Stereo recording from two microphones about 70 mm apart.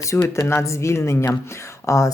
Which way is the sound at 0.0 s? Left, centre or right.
Left.